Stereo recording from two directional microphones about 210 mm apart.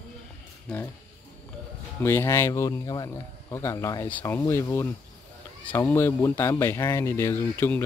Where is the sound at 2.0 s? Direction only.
10° left (ahead or behind).